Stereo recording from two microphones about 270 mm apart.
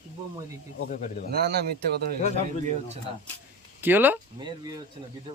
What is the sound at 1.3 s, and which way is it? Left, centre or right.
Speech, right.